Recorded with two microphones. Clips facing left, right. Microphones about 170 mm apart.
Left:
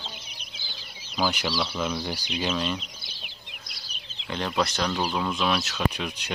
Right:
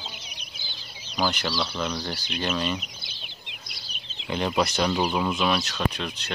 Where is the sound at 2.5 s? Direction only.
Centre (ahead or behind).